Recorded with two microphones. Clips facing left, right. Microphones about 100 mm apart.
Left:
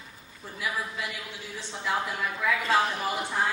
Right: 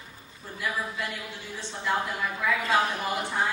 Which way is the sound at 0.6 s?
5° left (ahead or behind).